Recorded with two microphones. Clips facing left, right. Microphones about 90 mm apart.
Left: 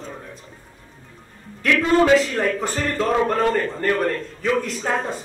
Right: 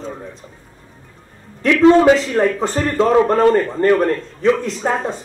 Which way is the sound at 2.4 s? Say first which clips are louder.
Right 6 dB; 25° right (ahead or behind).